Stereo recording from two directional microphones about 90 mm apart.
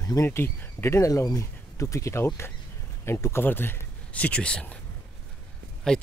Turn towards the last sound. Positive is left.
turn(degrees=10)  # may be behind; listen again after turning